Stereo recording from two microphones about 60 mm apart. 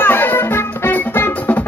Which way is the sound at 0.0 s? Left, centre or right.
Left.